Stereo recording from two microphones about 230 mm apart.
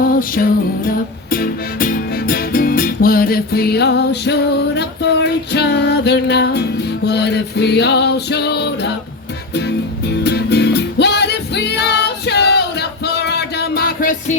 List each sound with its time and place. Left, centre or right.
0.0 s music: left